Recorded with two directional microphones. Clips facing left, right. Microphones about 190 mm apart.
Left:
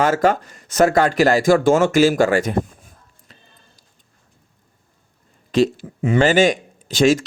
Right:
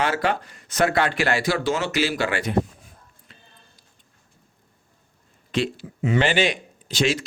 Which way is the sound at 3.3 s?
40° left (ahead or behind).